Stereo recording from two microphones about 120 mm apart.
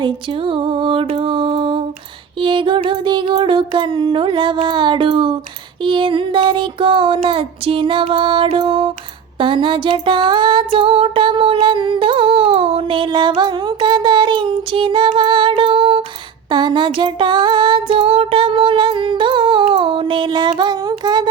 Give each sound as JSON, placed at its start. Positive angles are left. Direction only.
{"t": 0.0, "sound": "music", "side_deg": -45}
{"t": 2.4, "sound": "a sound", "side_deg": -45}
{"t": 20.5, "sound": "child singing", "side_deg": -40}